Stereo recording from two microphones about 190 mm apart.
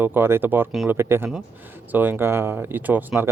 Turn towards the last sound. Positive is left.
turn(degrees=-10)  # may be behind; listen again after turning